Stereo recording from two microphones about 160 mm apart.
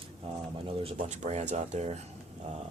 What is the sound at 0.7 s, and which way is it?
Speech, 35° right (ahead or behind).